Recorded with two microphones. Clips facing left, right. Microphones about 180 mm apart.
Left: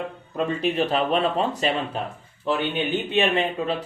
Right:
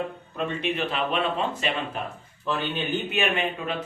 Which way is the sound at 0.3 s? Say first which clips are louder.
Left 5 dB; 35° left (ahead or behind).